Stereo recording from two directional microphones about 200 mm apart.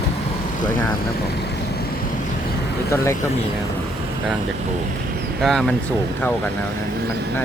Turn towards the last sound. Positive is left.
turn(degrees=5)  # may be behind; listen again after turning